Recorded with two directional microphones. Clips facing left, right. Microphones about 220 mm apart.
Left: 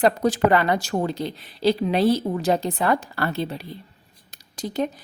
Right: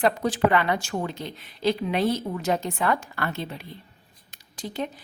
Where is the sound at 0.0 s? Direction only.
40° left (ahead or behind).